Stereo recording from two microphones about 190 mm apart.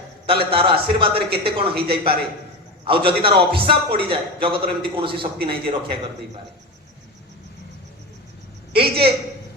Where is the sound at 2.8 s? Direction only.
30° right (ahead or behind).